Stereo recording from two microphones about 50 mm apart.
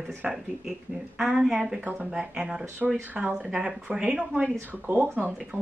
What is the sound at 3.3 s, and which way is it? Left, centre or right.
Speech, centre.